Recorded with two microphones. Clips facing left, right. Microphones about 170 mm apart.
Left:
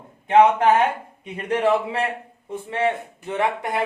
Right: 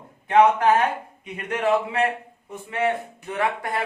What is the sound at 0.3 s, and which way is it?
A man's voice, 20° left (ahead or behind).